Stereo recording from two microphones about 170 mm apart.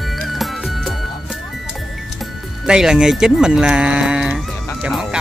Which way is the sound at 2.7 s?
5° right (ahead or behind).